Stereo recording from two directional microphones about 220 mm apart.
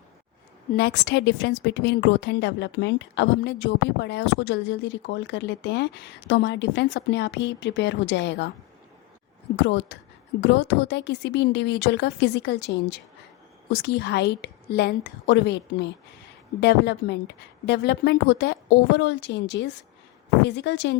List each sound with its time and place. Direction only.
0.7 s a woman's voice: 45° left (ahead or behind)
9.6 s a woman's voice: 55° left (ahead or behind)